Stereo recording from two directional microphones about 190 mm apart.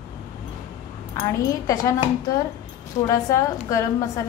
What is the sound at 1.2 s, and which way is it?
Speech, 15° left (ahead or behind).